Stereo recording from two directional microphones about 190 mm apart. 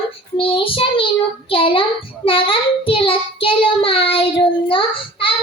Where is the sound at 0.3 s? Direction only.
30° left (ahead or behind).